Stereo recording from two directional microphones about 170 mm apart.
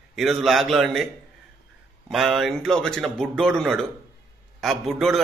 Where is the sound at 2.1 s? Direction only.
Centre (ahead or behind).